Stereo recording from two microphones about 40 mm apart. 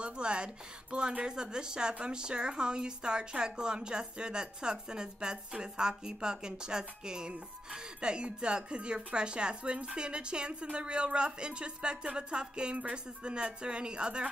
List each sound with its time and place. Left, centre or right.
0.0 s a woman's voice: right